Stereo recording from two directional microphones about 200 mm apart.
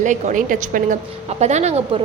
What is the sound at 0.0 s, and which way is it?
A woman's voice, 35° right (ahead or behind).